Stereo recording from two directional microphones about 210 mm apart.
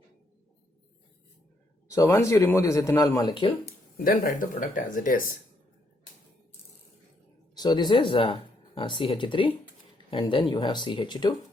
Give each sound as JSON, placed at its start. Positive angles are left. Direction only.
{"t": 1.9, "sound": "speech", "side_deg": 10}
{"t": 3.9, "sound": "speech", "side_deg": 40}
{"t": 7.5, "sound": "speech", "side_deg": 20}